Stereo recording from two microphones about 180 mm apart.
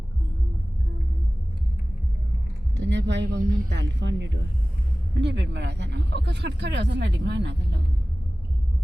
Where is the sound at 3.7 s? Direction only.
75° right (ahead or behind).